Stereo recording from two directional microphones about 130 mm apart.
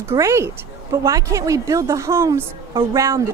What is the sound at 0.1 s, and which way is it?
A woman's voice, 20° right (ahead or behind).